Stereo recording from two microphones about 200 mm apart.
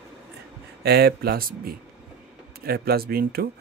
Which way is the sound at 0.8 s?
50° right (ahead or behind).